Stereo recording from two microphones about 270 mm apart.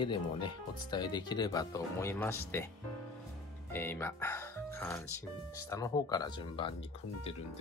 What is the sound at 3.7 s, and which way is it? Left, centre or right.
Speech, centre.